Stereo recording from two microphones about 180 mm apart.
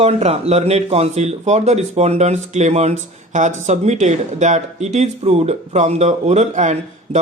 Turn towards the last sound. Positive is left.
turn(degrees=-40)  # may be behind; listen again after turning